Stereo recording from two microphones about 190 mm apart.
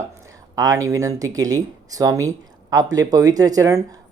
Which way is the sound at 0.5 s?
15° right (ahead or behind).